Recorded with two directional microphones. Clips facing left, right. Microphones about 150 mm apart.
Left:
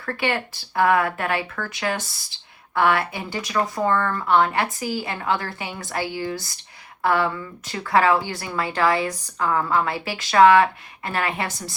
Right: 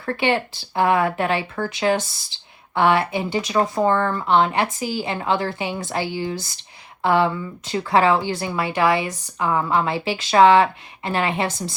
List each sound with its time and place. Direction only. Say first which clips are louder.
0.0 s speech: right 4 dB; 25° right (ahead or behind)